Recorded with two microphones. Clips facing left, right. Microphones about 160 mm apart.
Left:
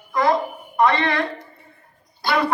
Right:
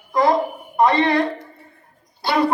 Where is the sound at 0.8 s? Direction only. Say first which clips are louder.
Right 3 dB; 35° right (ahead or behind).